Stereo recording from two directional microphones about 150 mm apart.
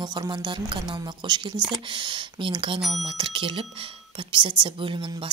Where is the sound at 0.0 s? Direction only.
30° right (ahead or behind).